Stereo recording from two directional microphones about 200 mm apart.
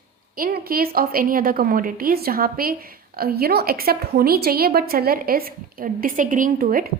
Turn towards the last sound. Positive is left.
turn(degrees=-45)  # may be behind; listen again after turning